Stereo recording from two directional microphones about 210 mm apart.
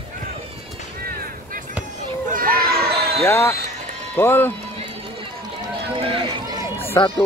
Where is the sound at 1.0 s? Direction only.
45° right (ahead or behind).